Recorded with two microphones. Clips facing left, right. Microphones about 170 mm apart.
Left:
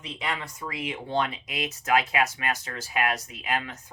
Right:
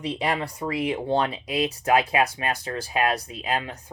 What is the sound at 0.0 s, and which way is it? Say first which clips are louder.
Speech: right 7 dB; 35° right (ahead or behind).